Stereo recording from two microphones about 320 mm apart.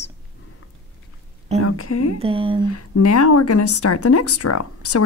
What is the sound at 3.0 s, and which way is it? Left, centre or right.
Speech, left.